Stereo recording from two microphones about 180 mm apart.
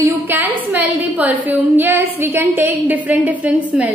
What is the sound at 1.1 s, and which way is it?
A woman's voice, 10° right (ahead or behind).